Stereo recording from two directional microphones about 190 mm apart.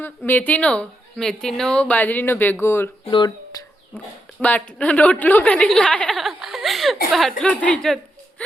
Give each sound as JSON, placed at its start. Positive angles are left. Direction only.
{"t": 0.0, "sound": "a woman's voice", "side_deg": 10}
{"t": 3.0, "sound": "a sound", "side_deg": 25}
{"t": 4.4, "sound": "a woman's voice", "side_deg": 5}